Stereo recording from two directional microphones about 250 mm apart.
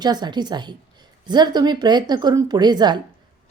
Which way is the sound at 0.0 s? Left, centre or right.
Centre.